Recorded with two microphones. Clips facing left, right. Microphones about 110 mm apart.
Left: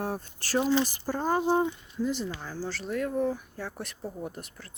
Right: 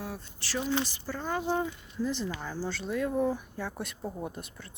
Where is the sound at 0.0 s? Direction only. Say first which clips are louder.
Left 6 dB; 45° left (ahead or behind).